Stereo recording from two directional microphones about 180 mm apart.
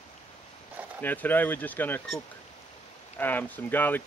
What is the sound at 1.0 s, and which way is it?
Speech, 10° left (ahead or behind).